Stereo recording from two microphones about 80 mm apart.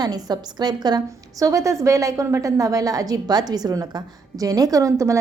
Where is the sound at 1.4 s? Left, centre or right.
Right.